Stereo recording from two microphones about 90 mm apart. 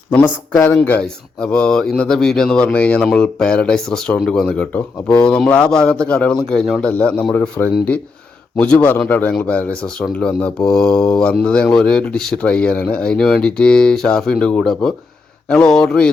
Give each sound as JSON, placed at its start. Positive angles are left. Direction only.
{"t": 0.2, "sound": "a man's voice", "side_deg": 25}
{"t": 1.4, "sound": "speech", "side_deg": 10}